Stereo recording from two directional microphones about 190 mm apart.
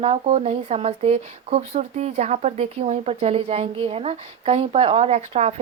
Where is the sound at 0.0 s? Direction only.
35° right (ahead or behind).